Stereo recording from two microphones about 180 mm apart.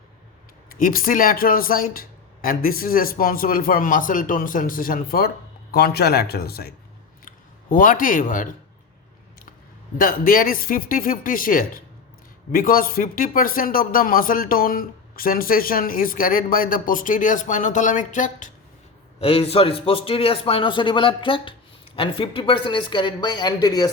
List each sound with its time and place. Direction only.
0.7 s speech: 50° left (ahead or behind)
10.0 s speech: 50° left (ahead or behind)
19.2 s a man's voice: 35° left (ahead or behind)